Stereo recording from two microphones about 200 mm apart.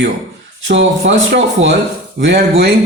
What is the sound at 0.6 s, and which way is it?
Speech, 65° right (ahead or behind).